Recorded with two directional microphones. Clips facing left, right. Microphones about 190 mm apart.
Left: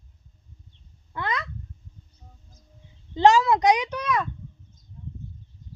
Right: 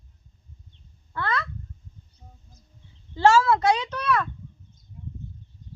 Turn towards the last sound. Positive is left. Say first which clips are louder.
# right 1 dB
turn(degrees=15)  # may be behind; listen again after turning